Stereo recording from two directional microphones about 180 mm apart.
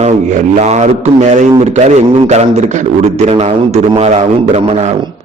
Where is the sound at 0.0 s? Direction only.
40° right (ahead or behind).